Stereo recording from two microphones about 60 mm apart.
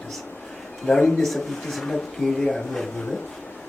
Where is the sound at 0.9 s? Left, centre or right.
Centre.